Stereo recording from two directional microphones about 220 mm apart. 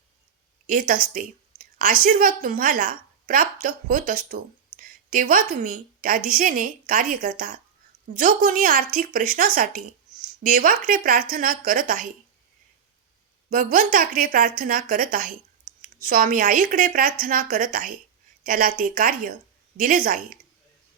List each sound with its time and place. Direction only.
0.7 s a woman's voice: 40° right (ahead or behind)
13.5 s a woman's voice: 40° right (ahead or behind)